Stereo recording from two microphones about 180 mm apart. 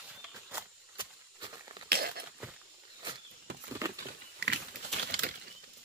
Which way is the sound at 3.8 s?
20° right (ahead or behind).